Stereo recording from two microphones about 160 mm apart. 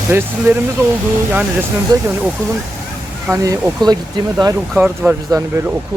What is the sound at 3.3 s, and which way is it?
Speech, 20° right (ahead or behind).